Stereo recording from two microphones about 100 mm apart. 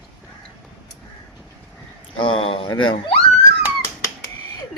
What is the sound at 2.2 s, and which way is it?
Speech, 60° left (ahead or behind).